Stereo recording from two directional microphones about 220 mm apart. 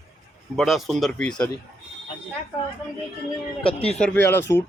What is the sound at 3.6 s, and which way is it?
Speech, 25° left (ahead or behind).